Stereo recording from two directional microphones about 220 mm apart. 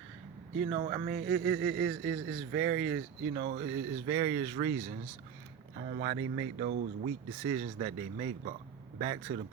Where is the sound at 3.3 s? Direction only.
35° right (ahead or behind).